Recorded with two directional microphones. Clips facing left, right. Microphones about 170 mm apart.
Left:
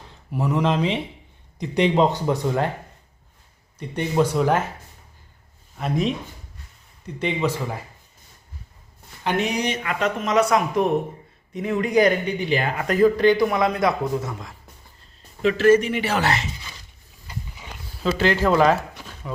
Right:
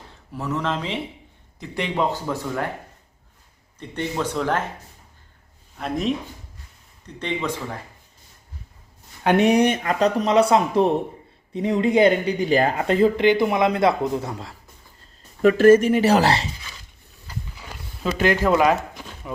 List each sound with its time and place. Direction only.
0.3 s speech: 15° left (ahead or behind)
3.8 s speech: 10° left (ahead or behind)
5.7 s speech: centre (ahead or behind)
7.2 s speech: 10° left (ahead or behind)
9.2 s speech: 60° right (ahead or behind)
9.8 s speech: 35° right (ahead or behind)
12.4 s speech: 40° right (ahead or behind)
12.9 s speech: 25° right (ahead or behind)
15.4 s speech: 50° right (ahead or behind); by 16.5 s 35° right (ahead or behind)
18.4 s speech: 10° right (ahead or behind)